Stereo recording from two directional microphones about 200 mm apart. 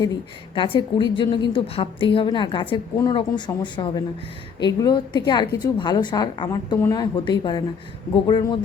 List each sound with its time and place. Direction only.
0.0 s a woman's voice: 20° left (ahead or behind)